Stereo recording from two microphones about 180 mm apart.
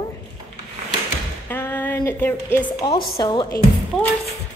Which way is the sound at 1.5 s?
10° left (ahead or behind).